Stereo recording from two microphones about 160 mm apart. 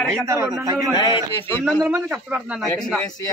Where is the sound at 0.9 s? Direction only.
25° left (ahead or behind).